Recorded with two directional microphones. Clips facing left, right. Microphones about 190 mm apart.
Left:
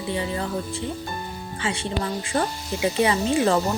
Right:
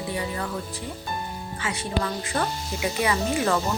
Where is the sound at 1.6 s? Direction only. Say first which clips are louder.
Left 1 dB; 30° left (ahead or behind).